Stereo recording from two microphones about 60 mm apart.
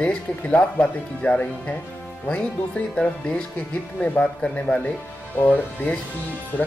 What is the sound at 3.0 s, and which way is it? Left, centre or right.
Speech, centre.